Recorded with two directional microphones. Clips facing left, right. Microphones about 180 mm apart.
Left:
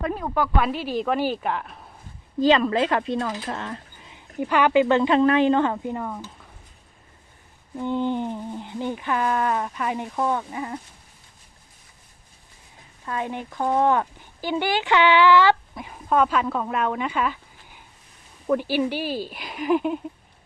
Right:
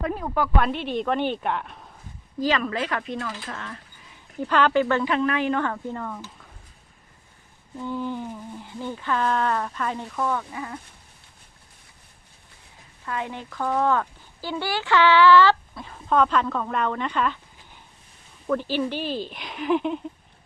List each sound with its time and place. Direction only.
0.6 s a woman's voice: 5° left (ahead or behind)
2.4 s speech: 25° left (ahead or behind)
3.5 s a sound: 30° left (ahead or behind)
4.4 s speech: 10° left (ahead or behind)
7.8 s speech: 25° left (ahead or behind)
10.1 s speech: 25° left (ahead or behind)
13.1 s speech: 20° left (ahead or behind)
18.4 s speech: 10° left (ahead or behind)